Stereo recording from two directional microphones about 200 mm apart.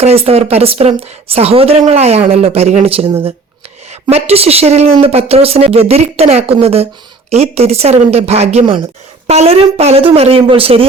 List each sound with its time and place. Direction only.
0.0 s a woman's voice: 30° right (ahead or behind)